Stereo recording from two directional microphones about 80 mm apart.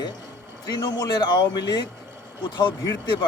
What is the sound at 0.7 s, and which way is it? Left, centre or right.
Speech, left.